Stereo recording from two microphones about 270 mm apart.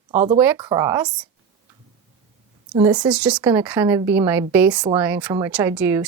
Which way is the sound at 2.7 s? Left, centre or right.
Centre.